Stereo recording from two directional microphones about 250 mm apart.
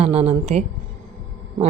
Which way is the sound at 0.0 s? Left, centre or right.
Right.